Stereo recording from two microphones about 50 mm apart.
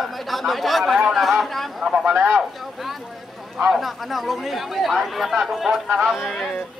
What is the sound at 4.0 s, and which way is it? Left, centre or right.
Speech, centre.